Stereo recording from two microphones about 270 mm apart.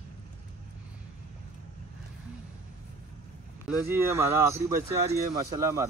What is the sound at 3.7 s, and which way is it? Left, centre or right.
Speech, centre.